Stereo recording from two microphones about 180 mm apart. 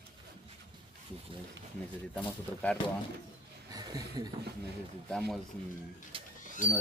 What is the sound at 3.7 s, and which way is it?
Speech, 20° right (ahead or behind).